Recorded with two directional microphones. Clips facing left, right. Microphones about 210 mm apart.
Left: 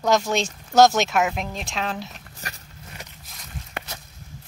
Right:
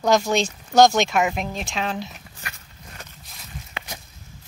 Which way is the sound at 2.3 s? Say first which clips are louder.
Left 5 dB; 35° left (ahead or behind).